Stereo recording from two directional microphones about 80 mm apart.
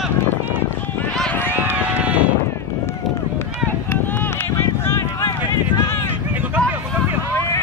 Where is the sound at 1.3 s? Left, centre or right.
Left.